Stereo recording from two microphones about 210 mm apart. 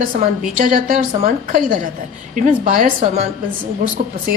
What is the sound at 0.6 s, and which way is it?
A woman's voice, 40° right (ahead or behind).